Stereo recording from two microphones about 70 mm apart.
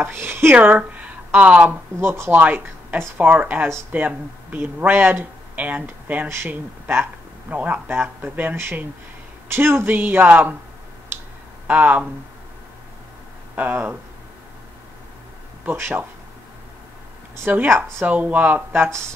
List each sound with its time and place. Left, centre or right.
0.0 s speech: right
0.6 s speech: right
1.7 s speech: right
2.3 s speech: right
6.2 s speech: right
11.6 s speech: right
13.6 s speech: right
15.6 s speech: right
17.5 s speech: right